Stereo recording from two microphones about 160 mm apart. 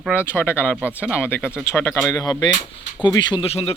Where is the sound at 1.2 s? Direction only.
15° left (ahead or behind).